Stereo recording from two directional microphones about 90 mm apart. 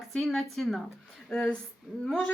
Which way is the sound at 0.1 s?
Centre (ahead or behind).